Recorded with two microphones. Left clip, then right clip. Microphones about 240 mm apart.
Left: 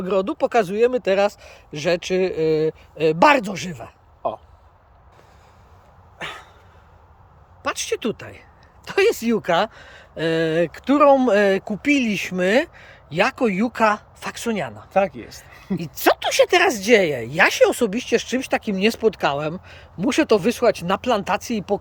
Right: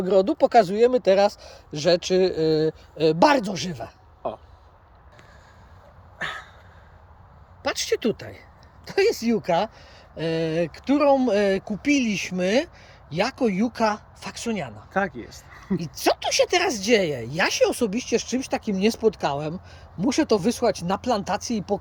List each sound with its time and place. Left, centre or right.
0.0 s speech: centre
4.2 s speech: left
6.1 s a sound: left
7.6 s speech: centre
14.9 s speech: left
15.4 s a sound: left
15.8 s speech: centre